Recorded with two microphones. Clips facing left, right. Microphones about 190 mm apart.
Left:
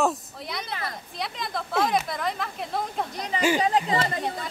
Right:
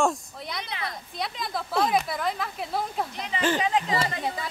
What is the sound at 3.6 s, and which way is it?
Speech, 35° left (ahead or behind).